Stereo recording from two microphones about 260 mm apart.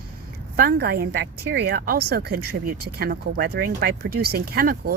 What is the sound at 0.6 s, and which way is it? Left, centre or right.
A woman's voice, right.